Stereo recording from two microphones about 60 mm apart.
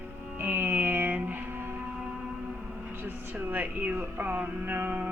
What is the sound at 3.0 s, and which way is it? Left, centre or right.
Speech, right.